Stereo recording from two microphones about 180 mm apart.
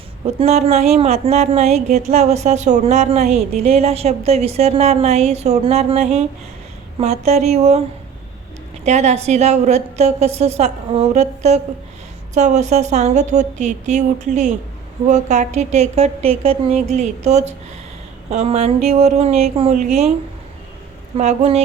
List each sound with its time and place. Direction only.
0.3 s speech: 35° right (ahead or behind)
8.8 s speech: 40° right (ahead or behind)
21.2 s speech: 35° right (ahead or behind)